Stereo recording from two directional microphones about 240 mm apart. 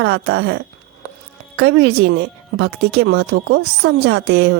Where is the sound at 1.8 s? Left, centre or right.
Right.